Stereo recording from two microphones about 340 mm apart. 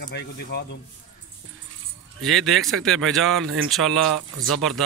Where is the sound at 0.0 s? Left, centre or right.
Left.